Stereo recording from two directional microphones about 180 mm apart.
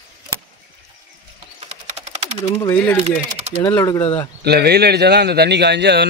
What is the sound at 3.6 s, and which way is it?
Speech, 20° left (ahead or behind).